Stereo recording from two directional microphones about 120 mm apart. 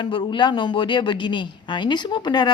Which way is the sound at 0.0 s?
45° left (ahead or behind).